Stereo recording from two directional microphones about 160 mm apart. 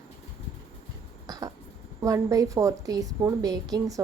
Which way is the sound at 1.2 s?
20° right (ahead or behind).